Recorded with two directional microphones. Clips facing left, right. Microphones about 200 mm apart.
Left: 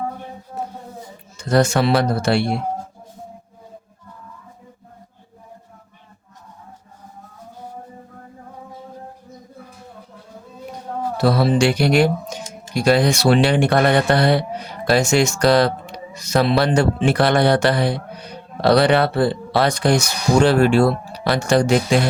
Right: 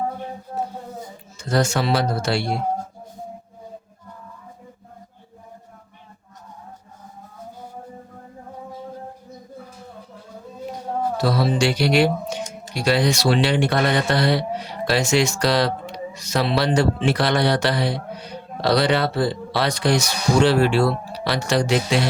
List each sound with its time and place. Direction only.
1.5 s speech: 60° left (ahead or behind)
11.2 s speech: 60° left (ahead or behind)